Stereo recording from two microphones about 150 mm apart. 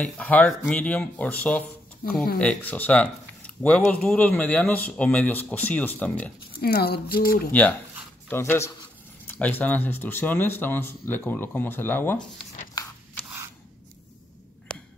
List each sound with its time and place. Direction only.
0.0 s speech: 10° left (ahead or behind)
2.0 s speech: 70° left (ahead or behind)
2.3 s speech: 10° left (ahead or behind)
6.6 s speech: 90° left
8.3 s speech: 15° left (ahead or behind)
14.7 s a sound: 5° left (ahead or behind)